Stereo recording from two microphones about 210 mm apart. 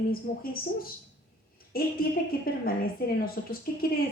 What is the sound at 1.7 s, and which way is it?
Speech, 45° left (ahead or behind).